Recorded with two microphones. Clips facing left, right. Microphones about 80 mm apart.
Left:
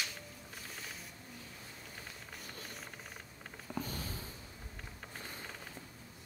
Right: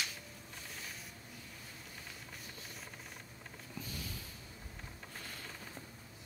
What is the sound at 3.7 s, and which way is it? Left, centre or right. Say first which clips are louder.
Sniff: left 6 dB; left.